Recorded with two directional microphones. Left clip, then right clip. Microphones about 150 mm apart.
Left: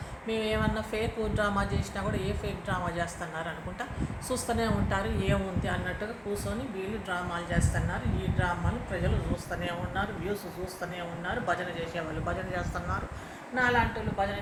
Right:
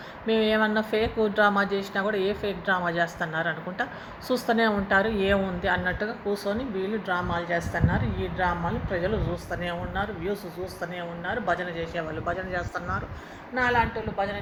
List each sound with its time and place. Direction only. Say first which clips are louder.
0.3 s a woman's voice: right 7 dB; 50° right (ahead or behind)